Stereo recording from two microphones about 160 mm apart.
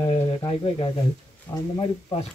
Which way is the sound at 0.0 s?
30° left (ahead or behind).